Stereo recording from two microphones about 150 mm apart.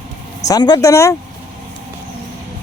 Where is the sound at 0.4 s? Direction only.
25° left (ahead or behind).